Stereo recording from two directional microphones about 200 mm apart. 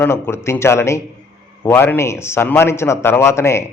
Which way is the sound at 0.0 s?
10° left (ahead or behind).